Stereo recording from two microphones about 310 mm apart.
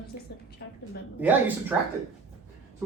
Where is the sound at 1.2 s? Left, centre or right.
Centre.